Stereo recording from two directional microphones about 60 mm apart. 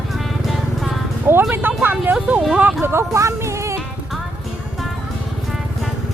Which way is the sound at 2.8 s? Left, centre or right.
Right.